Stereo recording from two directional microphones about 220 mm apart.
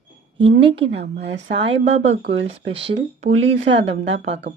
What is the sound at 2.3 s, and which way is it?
Speech, 60° right (ahead or behind).